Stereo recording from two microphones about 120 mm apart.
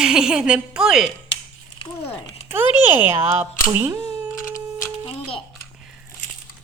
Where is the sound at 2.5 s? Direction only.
15° right (ahead or behind).